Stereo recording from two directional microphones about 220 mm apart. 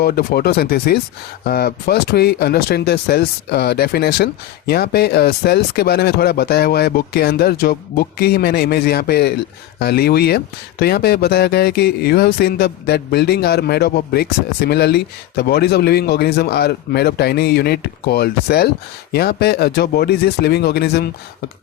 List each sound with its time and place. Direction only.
0.0 s speech: 45° left (ahead or behind)